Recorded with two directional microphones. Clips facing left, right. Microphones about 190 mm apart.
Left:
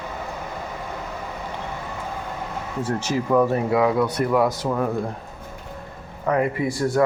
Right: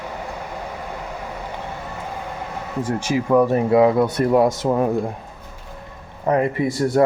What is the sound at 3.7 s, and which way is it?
Speech, 25° right (ahead or behind).